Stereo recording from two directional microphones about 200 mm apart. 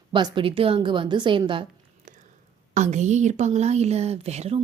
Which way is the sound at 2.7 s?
35° right (ahead or behind).